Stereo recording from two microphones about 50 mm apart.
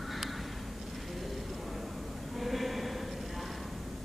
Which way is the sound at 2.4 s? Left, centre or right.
Centre.